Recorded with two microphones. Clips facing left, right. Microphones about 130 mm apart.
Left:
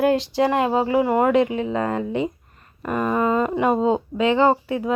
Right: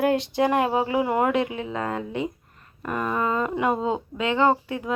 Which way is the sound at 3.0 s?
20° left (ahead or behind).